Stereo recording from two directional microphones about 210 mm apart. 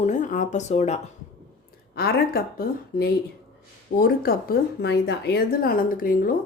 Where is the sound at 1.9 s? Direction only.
45° left (ahead or behind).